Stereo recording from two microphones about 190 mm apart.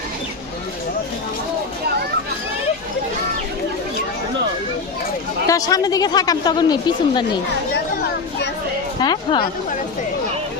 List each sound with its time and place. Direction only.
5.5 s a woman's voice: 20° left (ahead or behind)
9.0 s a woman's voice: 25° left (ahead or behind)